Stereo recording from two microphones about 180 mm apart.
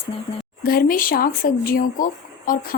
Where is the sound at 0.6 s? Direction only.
55° left (ahead or behind).